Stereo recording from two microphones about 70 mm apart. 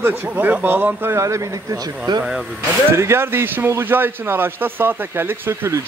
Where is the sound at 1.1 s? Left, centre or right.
Right.